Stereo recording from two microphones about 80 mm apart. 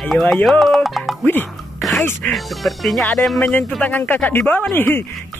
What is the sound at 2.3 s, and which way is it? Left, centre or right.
Speech, centre.